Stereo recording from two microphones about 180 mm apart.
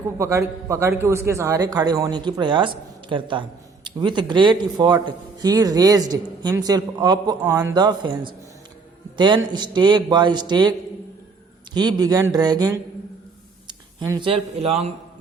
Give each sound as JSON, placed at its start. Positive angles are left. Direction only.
{"t": 0.2, "sound": "a man's voice", "side_deg": -15}
{"t": 13.7, "sound": "a sound", "side_deg": -20}
{"t": 14.3, "sound": "speech", "side_deg": -30}